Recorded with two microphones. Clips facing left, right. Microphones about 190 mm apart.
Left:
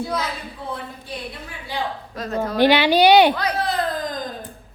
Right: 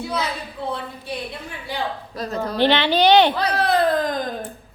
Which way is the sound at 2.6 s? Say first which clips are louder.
Left 3 dB; 10° left (ahead or behind).